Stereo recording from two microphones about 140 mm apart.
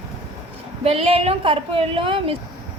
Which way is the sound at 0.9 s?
45° right (ahead or behind).